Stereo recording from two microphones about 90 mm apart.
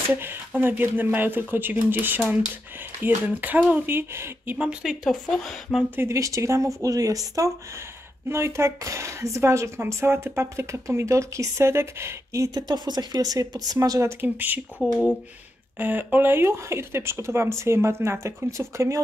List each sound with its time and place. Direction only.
0.1 s speech: 25° right (ahead or behind)
3.3 s speech: 20° right (ahead or behind)
4.6 s speech: 10° right (ahead or behind)
5.0 s speech: 5° left (ahead or behind)
5.9 s speech: 35° right (ahead or behind)
12.4 s speech: 50° right (ahead or behind)
13.7 s speech: 35° right (ahead or behind)
14.2 s speech: 20° right (ahead or behind)